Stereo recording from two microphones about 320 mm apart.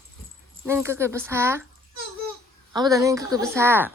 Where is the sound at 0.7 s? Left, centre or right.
Centre.